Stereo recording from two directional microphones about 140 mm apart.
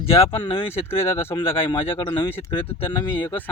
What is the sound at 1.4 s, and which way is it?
Speech, 35° left (ahead or behind).